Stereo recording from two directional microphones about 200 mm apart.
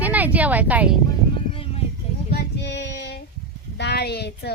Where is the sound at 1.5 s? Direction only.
25° left (ahead or behind).